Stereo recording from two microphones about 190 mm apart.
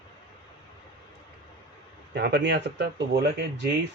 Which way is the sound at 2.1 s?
60° right (ahead or behind).